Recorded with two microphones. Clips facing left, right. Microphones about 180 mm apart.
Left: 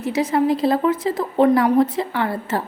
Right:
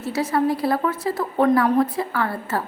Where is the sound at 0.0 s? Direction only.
20° left (ahead or behind).